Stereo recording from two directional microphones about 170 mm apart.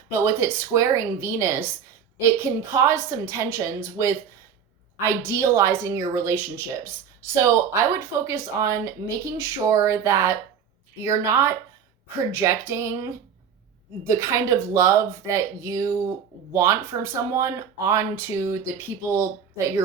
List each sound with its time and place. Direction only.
0.1 s speech: 15° right (ahead or behind)
14.2 s speech: 15° right (ahead or behind)